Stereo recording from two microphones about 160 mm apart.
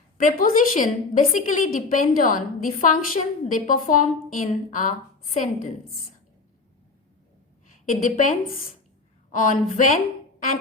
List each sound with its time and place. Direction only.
0.2 s a woman's voice: 60° left (ahead or behind)
7.9 s a woman's voice: 55° left (ahead or behind)